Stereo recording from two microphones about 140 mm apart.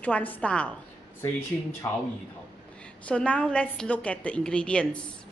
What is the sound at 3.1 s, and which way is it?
A woman's voice, 10° left (ahead or behind).